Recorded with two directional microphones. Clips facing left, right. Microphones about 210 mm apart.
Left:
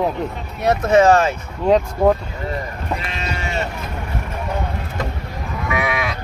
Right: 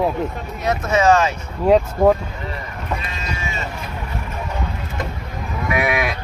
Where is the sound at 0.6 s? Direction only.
60° left (ahead or behind).